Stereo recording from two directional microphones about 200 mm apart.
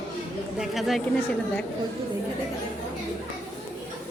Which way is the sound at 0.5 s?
Centre (ahead or behind).